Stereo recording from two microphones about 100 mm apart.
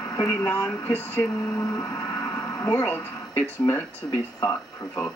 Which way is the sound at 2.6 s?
20° left (ahead or behind).